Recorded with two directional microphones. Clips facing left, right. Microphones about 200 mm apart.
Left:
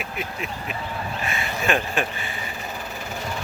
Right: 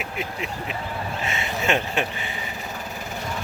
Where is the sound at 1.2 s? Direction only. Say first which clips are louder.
Even; 25° right (ahead or behind).